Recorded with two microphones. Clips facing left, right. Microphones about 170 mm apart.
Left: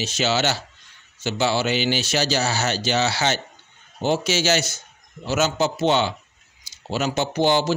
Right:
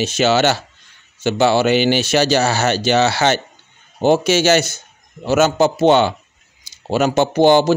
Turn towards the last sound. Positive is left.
turn(degrees=-55)  # may be behind; listen again after turning